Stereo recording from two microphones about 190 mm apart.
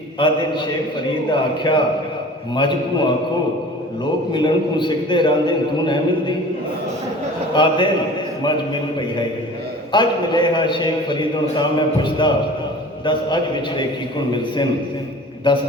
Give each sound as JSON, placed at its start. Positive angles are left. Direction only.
{"t": 1.3, "sound": "a man's voice", "side_deg": 25}
{"t": 4.3, "sound": "a man's voice", "side_deg": 25}
{"t": 7.5, "sound": "a man's voice", "side_deg": 25}
{"t": 9.9, "sound": "a man's voice", "side_deg": 25}